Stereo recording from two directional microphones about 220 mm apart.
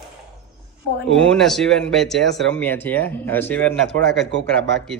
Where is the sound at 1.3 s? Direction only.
Centre (ahead or behind).